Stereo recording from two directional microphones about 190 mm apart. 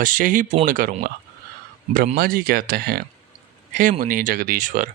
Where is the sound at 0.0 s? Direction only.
45° right (ahead or behind).